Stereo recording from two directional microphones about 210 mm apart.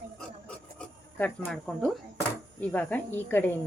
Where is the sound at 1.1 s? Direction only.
5° left (ahead or behind).